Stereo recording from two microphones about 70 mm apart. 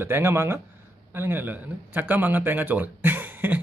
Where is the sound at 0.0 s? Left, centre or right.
Right.